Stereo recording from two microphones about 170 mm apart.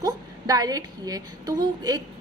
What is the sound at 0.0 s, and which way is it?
A woman's voice, 25° right (ahead or behind).